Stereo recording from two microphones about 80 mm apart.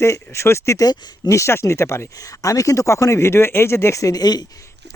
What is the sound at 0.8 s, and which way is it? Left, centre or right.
Speech, left.